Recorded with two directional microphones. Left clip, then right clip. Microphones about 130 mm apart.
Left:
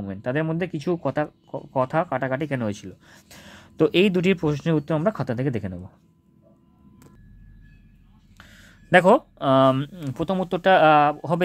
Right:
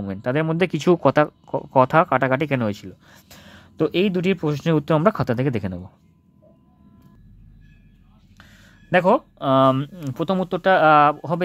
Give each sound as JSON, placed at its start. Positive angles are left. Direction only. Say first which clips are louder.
{"t": 0.0, "sound": "speech", "louder": "right 3 dB", "side_deg": -15}
{"t": 0.6, "sound": "speech", "louder": "right 8 dB", "side_deg": -35}
{"t": 4.7, "sound": "speech", "louder": "right 5 dB", "side_deg": -25}
{"t": 8.4, "sound": "speech", "louder": "left 1 dB", "side_deg": 10}
{"t": 10.5, "sound": "speech", "louder": "right 1 dB", "side_deg": 0}
{"t": 11.0, "sound": "speech", "louder": "right 3 dB", "side_deg": -10}